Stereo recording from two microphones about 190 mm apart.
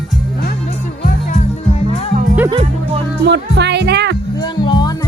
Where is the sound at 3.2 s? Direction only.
65° right (ahead or behind).